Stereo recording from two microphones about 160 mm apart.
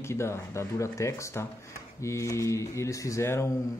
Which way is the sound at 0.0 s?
15° left (ahead or behind).